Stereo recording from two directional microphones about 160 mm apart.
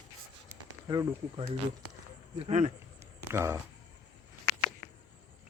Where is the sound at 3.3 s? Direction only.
15° right (ahead or behind).